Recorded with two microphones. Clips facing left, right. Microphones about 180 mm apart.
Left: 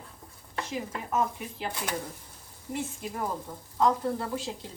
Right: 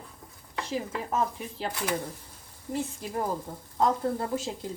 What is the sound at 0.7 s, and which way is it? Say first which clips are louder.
Speech: right 2 dB; 30° right (ahead or behind).